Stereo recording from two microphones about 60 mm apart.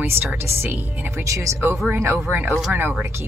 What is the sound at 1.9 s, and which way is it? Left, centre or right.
Speech, right.